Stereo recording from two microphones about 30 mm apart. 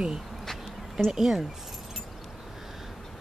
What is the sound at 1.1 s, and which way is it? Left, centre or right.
Speech, centre.